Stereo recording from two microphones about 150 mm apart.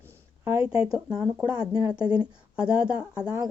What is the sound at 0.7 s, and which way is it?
Speech, 40° left (ahead or behind).